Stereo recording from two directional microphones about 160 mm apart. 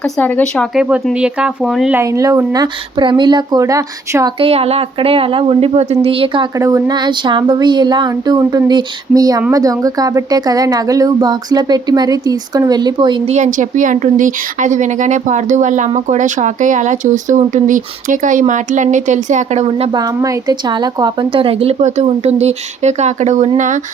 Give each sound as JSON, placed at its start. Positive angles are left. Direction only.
{"t": 0.2, "sound": "speech", "side_deg": 10}
{"t": 0.8, "sound": "speech", "side_deg": -5}
{"t": 2.0, "sound": "speech", "side_deg": -20}
{"t": 4.4, "sound": "a woman's voice", "side_deg": -40}
{"t": 6.6, "sound": "speech", "side_deg": -20}
{"t": 13.2, "sound": "speech", "side_deg": -45}
{"t": 19.9, "sound": "a woman's voice", "side_deg": -25}